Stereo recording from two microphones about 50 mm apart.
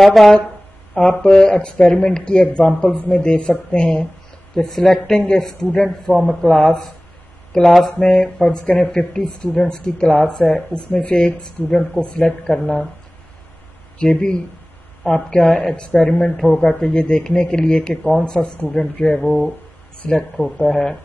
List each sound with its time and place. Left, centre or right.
0.0 s speech: centre
0.9 s speech: centre
4.6 s speech: centre
11.1 s speech: centre
13.9 s speech: centre